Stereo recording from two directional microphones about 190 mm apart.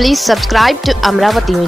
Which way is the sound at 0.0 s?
Centre (ahead or behind).